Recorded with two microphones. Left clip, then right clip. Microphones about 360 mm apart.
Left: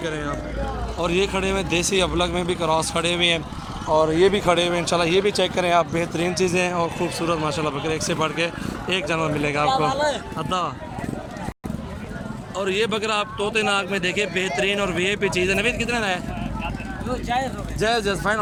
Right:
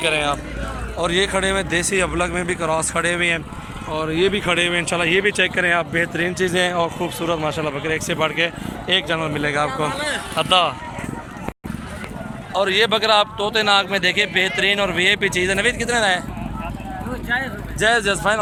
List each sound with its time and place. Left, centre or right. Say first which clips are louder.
0.1 s speech: right 7 dB; centre
12.5 s speech: right 6 dB; centre
17.7 s speech: right 5 dB; centre